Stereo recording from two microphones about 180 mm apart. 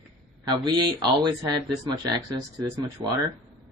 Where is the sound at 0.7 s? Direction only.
20° right (ahead or behind).